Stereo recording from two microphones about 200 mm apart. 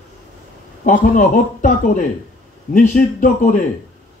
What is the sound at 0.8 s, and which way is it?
A man's voice, 40° left (ahead or behind).